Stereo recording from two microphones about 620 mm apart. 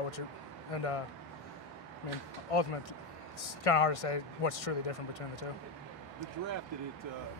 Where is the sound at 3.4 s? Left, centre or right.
Left.